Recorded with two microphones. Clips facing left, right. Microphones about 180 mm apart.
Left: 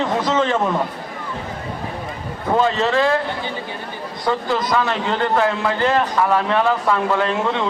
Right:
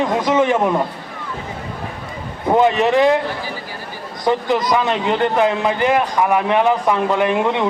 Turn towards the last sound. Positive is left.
turn(degrees=-15)  # may be behind; listen again after turning